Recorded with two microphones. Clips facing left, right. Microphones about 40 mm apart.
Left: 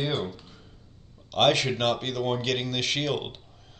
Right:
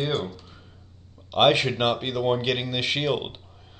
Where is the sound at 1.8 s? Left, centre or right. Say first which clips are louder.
Right 2 dB; centre.